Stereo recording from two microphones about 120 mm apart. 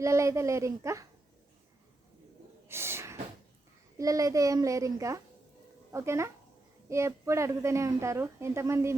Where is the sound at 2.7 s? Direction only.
20° right (ahead or behind).